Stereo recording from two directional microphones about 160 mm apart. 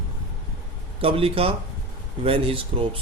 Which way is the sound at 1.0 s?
35° right (ahead or behind).